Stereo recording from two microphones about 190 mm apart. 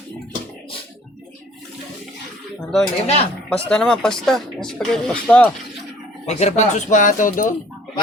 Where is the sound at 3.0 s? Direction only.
35° left (ahead or behind).